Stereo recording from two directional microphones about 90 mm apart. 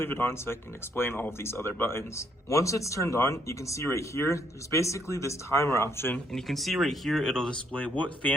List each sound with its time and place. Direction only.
0.0 s speech: 25° left (ahead or behind)
6.3 s speech: centre (ahead or behind); by 8.3 s 15° left (ahead or behind)